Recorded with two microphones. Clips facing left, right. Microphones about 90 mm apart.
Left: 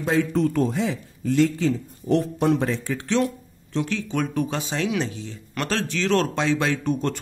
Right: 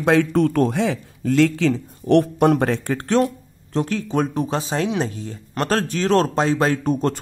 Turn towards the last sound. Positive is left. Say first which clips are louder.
# right 4 dB
turn(degrees=-40)  # may be behind; listen again after turning